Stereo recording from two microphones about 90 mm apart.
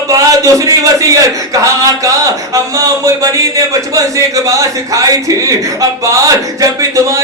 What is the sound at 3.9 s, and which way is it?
A man's voice, 40° right (ahead or behind).